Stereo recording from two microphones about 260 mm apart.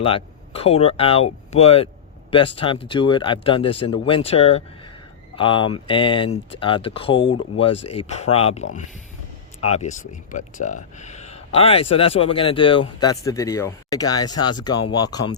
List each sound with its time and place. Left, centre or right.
0.0 s speech: left